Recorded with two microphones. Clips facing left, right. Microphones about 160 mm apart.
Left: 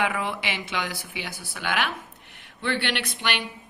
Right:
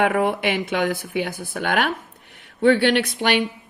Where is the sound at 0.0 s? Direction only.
45° right (ahead or behind).